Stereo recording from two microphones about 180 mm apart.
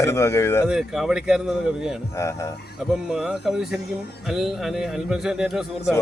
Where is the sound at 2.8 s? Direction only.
Centre (ahead or behind).